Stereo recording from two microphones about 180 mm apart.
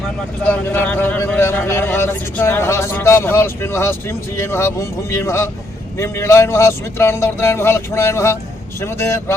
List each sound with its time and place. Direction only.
0.4 s a man's voice: 10° left (ahead or behind)